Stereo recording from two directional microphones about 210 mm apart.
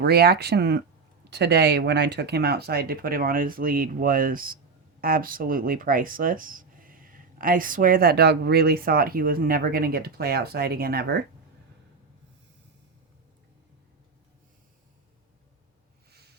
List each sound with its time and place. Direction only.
0.0 s speech: 50° right (ahead or behind)